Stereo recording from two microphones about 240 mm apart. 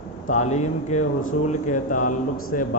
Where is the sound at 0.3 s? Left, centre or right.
Left.